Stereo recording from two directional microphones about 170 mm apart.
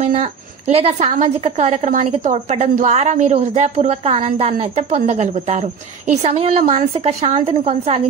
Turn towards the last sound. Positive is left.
turn(degrees=-35)  # may be behind; listen again after turning